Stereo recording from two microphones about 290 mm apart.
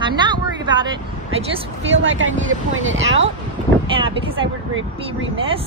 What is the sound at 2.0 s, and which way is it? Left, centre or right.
Speech, right.